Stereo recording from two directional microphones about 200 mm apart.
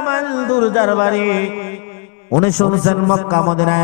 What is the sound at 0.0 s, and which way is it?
Mantra, 15° left (ahead or behind).